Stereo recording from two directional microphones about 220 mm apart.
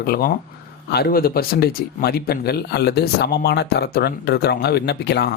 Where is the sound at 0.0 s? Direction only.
40° left (ahead or behind).